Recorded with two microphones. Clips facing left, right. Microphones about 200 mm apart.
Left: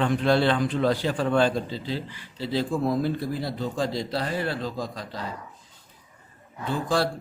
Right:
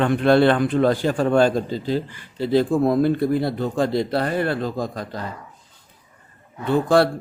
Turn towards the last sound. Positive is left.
turn(degrees=-60)  # may be behind; listen again after turning